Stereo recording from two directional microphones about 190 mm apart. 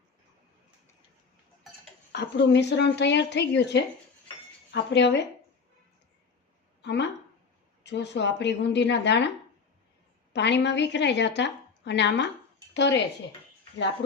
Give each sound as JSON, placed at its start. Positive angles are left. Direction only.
{"t": 2.1, "sound": "a woman's voice", "side_deg": 65}
{"t": 6.8, "sound": "a woman's voice", "side_deg": 65}
{"t": 10.3, "sound": "a woman's voice", "side_deg": 65}